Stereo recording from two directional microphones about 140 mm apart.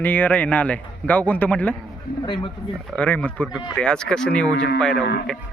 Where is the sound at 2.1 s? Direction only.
90° left.